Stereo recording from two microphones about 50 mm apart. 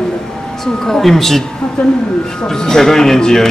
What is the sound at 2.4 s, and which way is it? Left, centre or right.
Speech, centre.